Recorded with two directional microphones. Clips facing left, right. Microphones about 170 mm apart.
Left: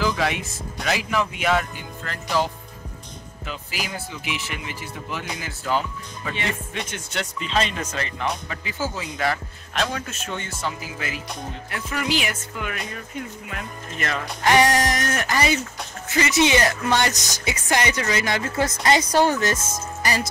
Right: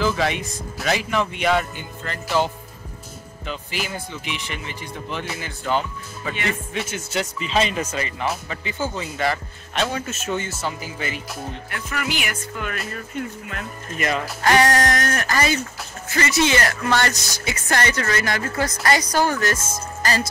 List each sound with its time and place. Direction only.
0.0 s speech: centre (ahead or behind)
11.7 s speech: 30° left (ahead or behind)
13.9 s speech: 10° right (ahead or behind)
14.4 s music: 15° left (ahead or behind)
20.0 s speech: 15° left (ahead or behind)